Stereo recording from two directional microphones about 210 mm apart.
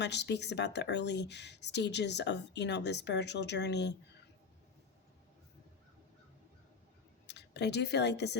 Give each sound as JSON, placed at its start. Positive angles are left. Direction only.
{"t": 0.0, "sound": "speech", "side_deg": 55}
{"t": 7.3, "sound": "speech", "side_deg": 55}